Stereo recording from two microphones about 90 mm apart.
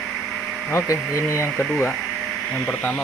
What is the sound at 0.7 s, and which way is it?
Speech, 30° left (ahead or behind).